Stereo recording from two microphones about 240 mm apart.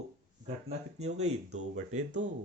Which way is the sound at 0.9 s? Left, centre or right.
Right.